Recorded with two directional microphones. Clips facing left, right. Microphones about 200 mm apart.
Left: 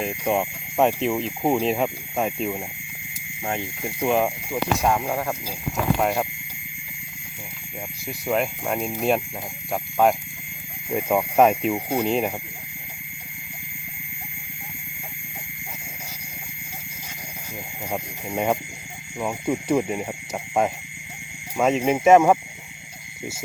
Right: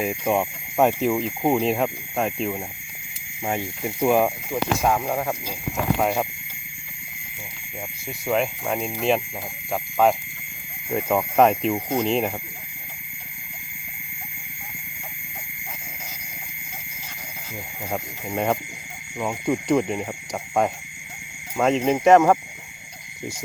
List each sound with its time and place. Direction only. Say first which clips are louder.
0.0 s speech: right 1 dB; 5° right (ahead or behind)
4.0 s speech: right 2 dB; 5° right (ahead or behind)
5.0 s speech: right 1 dB; 20° right (ahead or behind)
8.3 s speech: right 1 dB; centre (ahead or behind)
17.9 s speech: even; 10° left (ahead or behind)